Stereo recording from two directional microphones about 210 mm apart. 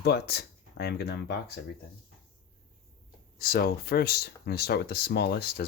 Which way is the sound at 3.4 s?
45° left (ahead or behind).